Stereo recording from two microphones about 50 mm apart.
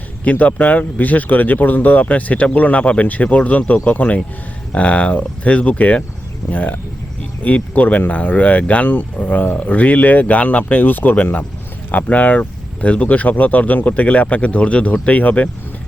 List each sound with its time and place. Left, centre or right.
0.3 s speech: left